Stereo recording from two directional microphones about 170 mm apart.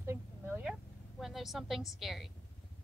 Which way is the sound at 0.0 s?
15° right (ahead or behind).